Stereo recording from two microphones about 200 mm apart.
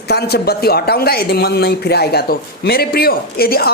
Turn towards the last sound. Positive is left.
turn(degrees=50)  # may be behind; listen again after turning